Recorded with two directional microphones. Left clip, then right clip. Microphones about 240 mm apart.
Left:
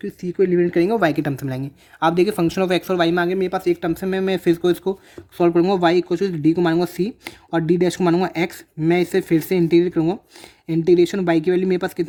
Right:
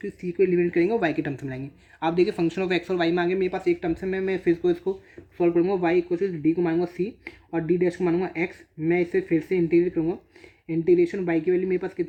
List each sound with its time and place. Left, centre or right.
0.0 s speech: left